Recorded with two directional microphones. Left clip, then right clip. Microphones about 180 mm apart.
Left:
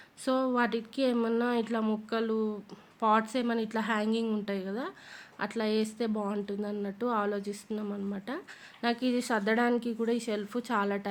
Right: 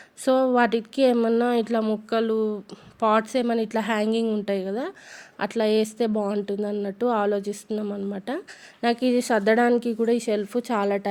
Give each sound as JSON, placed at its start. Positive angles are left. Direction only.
{"t": 0.3, "sound": "speech", "side_deg": -35}